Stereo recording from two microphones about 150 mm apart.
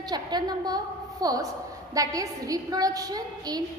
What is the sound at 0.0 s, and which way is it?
A woman's voice, 30° right (ahead or behind).